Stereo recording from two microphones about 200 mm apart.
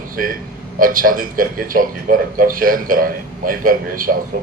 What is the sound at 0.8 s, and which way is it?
A man's voice, 45° right (ahead or behind).